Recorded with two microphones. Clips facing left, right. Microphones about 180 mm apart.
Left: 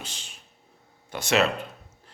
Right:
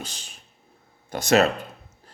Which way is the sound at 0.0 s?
40° right (ahead or behind).